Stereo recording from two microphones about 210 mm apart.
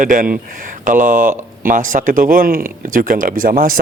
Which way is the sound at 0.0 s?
40° right (ahead or behind).